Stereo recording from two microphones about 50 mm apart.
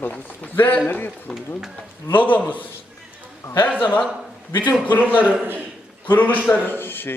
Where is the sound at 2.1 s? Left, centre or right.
Left.